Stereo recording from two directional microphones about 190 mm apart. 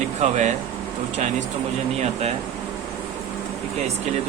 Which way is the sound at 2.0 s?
35° right (ahead or behind).